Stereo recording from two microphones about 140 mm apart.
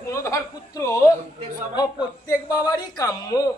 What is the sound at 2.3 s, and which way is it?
A man's voice, 25° left (ahead or behind).